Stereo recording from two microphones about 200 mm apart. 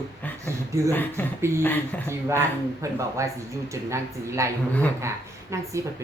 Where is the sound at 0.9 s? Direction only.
10° left (ahead or behind).